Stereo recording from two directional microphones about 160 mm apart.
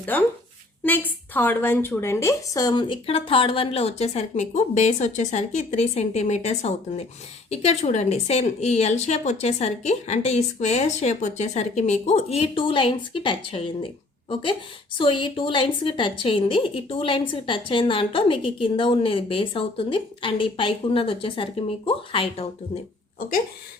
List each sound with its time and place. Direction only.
0.0 s a woman's voice: 10° left (ahead or behind); by 22.8 s 35° left (ahead or behind)